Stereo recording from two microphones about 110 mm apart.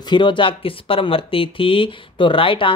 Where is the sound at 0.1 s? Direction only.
45° left (ahead or behind).